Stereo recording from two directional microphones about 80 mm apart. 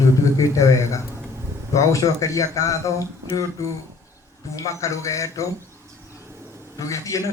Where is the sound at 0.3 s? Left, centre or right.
Left.